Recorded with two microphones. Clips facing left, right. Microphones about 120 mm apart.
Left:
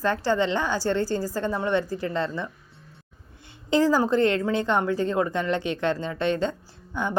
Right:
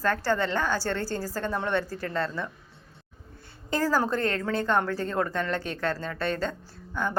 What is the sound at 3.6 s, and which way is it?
A woman's voice, 20° left (ahead or behind).